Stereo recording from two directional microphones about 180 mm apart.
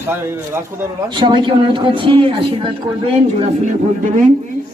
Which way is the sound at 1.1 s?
25° right (ahead or behind).